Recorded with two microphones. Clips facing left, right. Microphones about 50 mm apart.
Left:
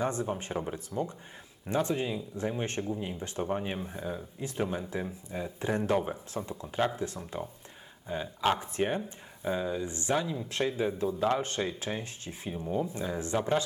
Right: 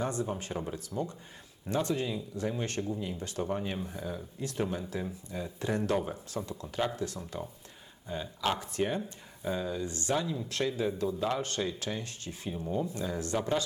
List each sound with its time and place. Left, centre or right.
0.0 s speech: left